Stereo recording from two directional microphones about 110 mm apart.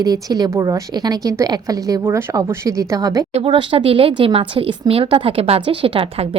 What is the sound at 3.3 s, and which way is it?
Speech, 55° right (ahead or behind).